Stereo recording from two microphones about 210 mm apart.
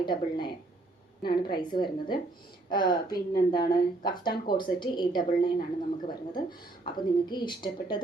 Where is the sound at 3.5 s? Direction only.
45° left (ahead or behind).